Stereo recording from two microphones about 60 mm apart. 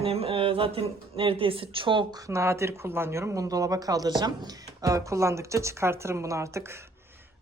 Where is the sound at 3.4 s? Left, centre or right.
Right.